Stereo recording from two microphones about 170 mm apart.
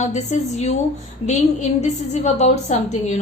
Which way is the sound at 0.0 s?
45° left (ahead or behind).